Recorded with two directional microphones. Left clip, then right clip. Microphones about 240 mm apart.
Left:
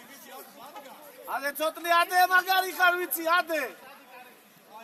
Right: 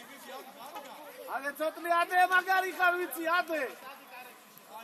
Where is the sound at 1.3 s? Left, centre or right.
Left.